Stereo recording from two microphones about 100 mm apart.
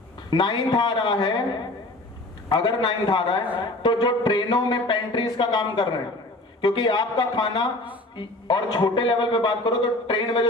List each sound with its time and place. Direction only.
0.3 s a man's voice: 50° left (ahead or behind)
2.5 s a man's voice: 50° left (ahead or behind)